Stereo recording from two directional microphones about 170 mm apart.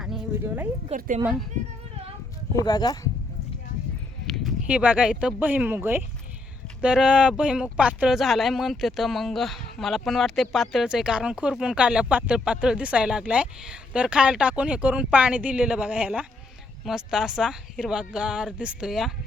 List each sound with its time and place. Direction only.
0.4 s speech: 10° right (ahead or behind)
0.9 s a woman's voice: 50° right (ahead or behind)
1.2 s speech: centre (ahead or behind)
2.6 s speech: 25° left (ahead or behind)
4.3 s speech: 5° right (ahead or behind)